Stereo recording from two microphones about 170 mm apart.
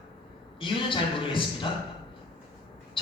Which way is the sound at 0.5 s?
30° left (ahead or behind).